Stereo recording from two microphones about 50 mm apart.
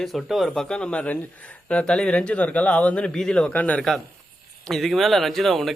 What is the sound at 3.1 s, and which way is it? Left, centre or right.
Speech, centre.